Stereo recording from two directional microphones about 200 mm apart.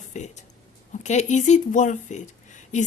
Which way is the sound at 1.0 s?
35° left (ahead or behind).